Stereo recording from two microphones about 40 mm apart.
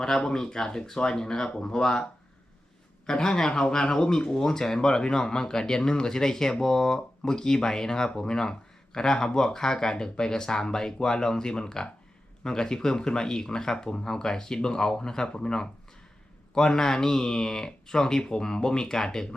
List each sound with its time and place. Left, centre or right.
0.0 s speech: centre
3.1 s speech: centre